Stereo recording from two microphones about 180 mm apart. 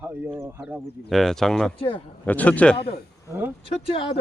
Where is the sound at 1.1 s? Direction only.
Centre (ahead or behind).